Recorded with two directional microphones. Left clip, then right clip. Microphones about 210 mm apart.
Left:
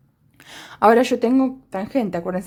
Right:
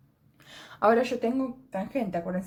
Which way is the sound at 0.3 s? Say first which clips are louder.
Left 9 dB; 30° left (ahead or behind).